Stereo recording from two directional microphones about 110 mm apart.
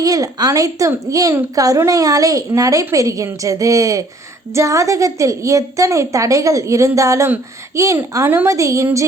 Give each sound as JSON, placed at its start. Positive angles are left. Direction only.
{"t": 0.0, "sound": "a woman's voice", "side_deg": -35}